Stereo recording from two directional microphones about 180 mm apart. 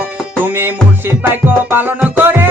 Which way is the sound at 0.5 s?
10° right (ahead or behind).